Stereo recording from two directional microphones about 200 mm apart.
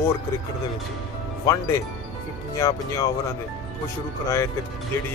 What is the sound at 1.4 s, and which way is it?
Speech, 15° left (ahead or behind).